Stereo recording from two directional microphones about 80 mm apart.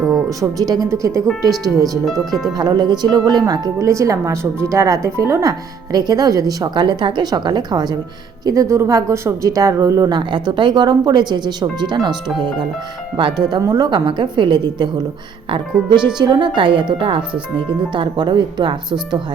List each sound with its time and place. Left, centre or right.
0.1 s speech: right
1.3 s speech: centre
2.5 s speech: right
6.8 s speech: right
8.4 s speech: right
10.1 s speech: right
13.1 s speech: right
13.6 s speech: right
16.0 s speech: right
16.6 s a woman's voice: right